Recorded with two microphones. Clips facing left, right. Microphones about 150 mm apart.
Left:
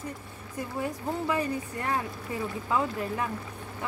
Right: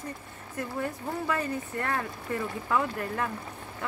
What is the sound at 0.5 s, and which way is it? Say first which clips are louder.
Speech: even; 15° left (ahead or behind).